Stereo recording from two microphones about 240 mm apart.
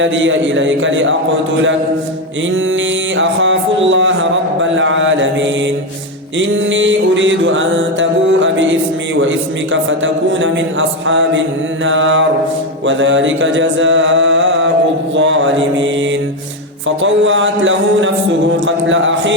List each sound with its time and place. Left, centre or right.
0.0 s music: right
3.2 s music: right
10.0 s music: right
17.0 s music: right